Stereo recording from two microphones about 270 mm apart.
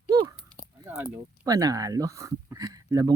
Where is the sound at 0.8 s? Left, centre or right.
Centre.